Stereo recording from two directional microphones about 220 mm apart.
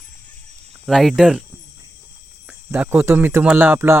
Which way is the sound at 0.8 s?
Centre (ahead or behind).